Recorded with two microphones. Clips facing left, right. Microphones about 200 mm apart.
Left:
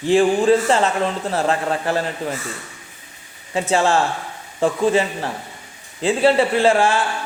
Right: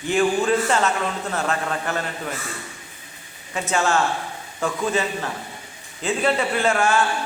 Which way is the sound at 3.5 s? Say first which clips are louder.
Left 4 dB; 30° left (ahead or behind).